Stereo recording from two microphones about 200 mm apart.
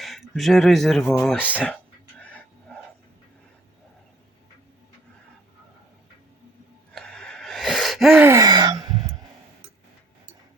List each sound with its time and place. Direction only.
0.0 s a sound: centre (ahead or behind)
6.9 s gasp: 5° left (ahead or behind)
8.3 s wail: 20° right (ahead or behind)